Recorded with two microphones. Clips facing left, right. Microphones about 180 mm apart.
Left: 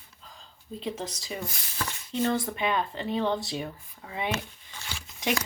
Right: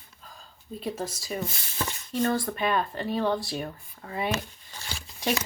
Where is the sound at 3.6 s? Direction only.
45° right (ahead or behind).